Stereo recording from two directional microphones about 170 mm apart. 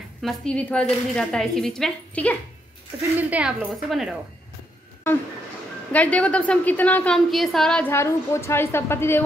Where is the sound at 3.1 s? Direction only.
10° right (ahead or behind).